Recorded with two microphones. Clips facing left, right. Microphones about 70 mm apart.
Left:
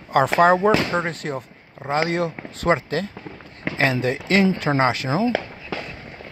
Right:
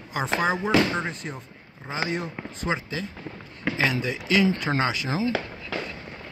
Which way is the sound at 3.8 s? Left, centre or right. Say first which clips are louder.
Left 6 dB; left.